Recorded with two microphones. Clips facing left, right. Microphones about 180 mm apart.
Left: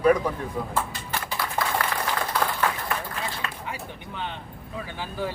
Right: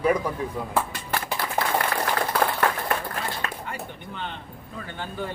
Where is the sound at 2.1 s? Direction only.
50° right (ahead or behind).